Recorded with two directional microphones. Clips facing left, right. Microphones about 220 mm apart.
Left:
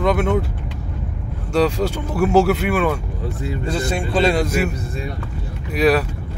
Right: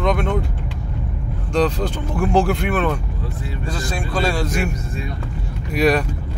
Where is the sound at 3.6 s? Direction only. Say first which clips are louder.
Left 4 dB; 25° left (ahead or behind).